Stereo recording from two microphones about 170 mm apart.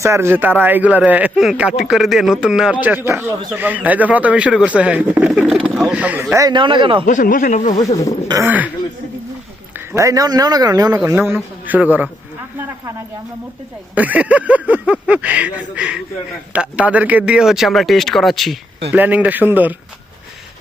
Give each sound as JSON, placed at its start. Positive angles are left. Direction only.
{"t": 0.0, "sound": "speech", "side_deg": -15}
{"t": 7.0, "sound": "speech", "side_deg": 50}
{"t": 8.3, "sound": "speech", "side_deg": -15}
{"t": 9.7, "sound": "a man's voice", "side_deg": -15}
{"t": 13.9, "sound": "speech", "side_deg": -10}